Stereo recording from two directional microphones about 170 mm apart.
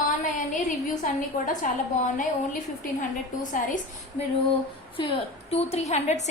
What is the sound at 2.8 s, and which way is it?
A woman's voice, 50° left (ahead or behind).